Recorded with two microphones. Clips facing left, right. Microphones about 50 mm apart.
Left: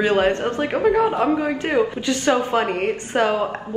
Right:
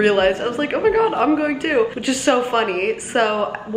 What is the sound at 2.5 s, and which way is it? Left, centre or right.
Speech, right.